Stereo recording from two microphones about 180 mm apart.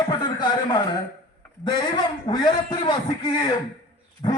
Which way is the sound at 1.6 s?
25° left (ahead or behind).